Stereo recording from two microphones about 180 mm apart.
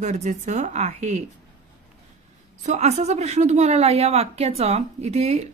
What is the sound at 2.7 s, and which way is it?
A woman's voice, 35° right (ahead or behind).